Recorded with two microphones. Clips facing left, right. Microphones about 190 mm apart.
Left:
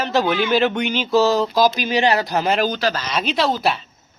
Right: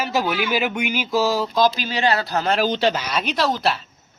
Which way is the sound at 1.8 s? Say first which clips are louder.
Left 3 dB; 15° left (ahead or behind).